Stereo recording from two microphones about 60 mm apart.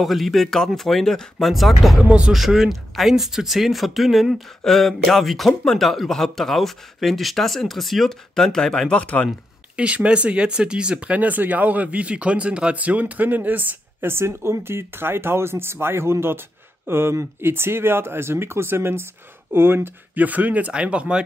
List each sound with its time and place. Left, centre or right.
0.0 s speech: centre
1.4 s speech: centre
2.0 s speech: centre
2.3 s speech: centre
9.0 s speech: left
9.8 s speech: right
14.1 s speech: right
20.2 s speech: right